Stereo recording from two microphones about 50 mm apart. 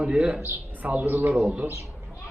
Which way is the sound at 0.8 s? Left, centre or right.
Right.